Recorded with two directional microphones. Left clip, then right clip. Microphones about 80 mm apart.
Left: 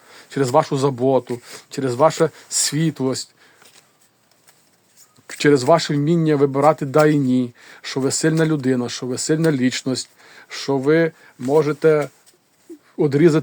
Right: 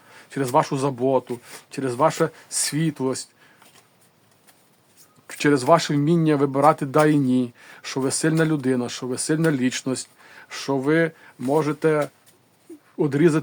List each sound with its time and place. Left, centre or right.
0.1 s speech: left
5.2 s speech: left
11.3 s speech: left
11.6 s speech: left
13.0 s speech: left